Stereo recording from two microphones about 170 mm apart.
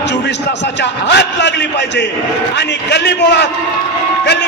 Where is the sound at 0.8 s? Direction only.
85° left.